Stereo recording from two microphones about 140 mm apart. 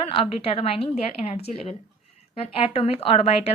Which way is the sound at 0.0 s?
45° left (ahead or behind).